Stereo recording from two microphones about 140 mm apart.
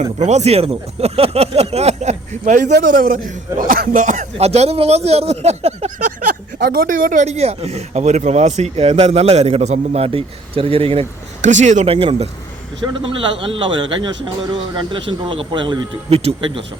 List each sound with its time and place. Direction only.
0.2 s speech: 55° right (ahead or behind)
6.1 s speech: 85° right; by 11.0 s 45° right (ahead or behind)
11.4 s speech: 60° right (ahead or behind); by 16.6 s 40° right (ahead or behind)